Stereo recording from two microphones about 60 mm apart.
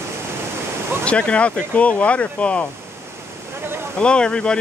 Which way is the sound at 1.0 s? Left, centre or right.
Centre.